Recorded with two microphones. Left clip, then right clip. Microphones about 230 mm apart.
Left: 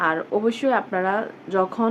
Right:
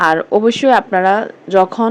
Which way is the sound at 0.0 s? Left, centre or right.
Right.